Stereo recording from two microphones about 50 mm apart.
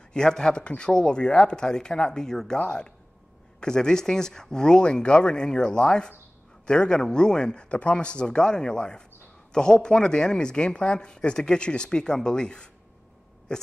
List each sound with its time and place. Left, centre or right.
0.1 s speech: centre